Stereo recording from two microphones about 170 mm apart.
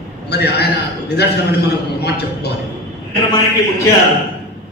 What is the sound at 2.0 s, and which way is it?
Speech, 75° left (ahead or behind).